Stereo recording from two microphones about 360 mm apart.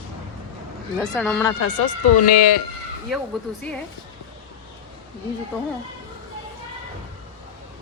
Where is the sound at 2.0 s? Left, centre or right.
Left.